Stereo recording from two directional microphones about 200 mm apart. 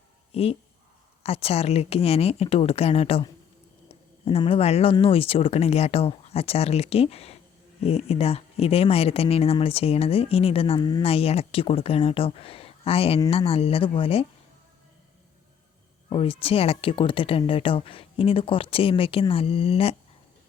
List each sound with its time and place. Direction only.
0.3 s speech: 30° left (ahead or behind)
16.0 s speech: 25° left (ahead or behind)